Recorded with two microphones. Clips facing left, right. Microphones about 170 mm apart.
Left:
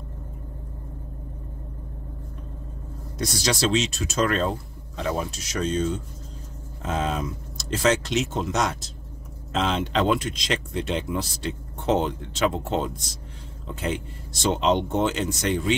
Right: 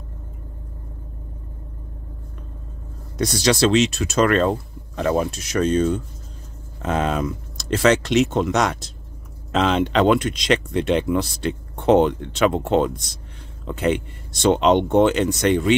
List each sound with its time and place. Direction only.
3.4 s speech: 70° right (ahead or behind)